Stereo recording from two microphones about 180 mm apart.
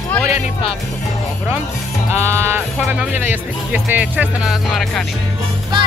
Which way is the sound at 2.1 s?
15° right (ahead or behind).